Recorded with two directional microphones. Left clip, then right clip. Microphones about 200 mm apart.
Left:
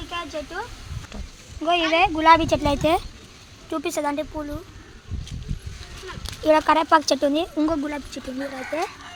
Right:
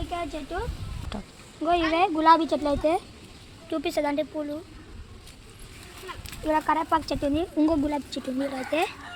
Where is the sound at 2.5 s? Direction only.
50° left (ahead or behind).